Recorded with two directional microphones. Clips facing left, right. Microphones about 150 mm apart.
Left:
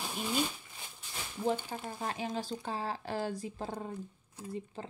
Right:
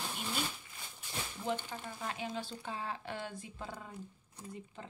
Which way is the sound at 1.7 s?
35° left (ahead or behind).